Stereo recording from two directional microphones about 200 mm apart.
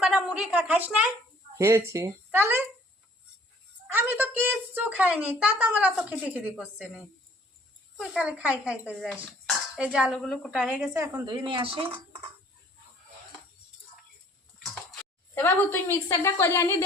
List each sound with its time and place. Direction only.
0.0 s a woman's voice: 5° right (ahead or behind)
3.8 s speech: 10° right (ahead or behind)
10.9 s speech: 15° right (ahead or behind)
15.4 s a woman's voice: 10° left (ahead or behind)